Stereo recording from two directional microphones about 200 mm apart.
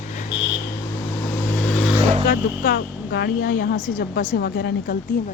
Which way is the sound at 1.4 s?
10° left (ahead or behind).